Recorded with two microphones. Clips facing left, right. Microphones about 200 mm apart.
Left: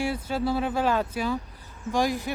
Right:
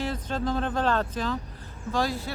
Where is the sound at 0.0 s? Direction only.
10° left (ahead or behind).